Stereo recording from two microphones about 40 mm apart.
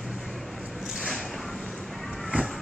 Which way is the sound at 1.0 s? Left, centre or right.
Centre.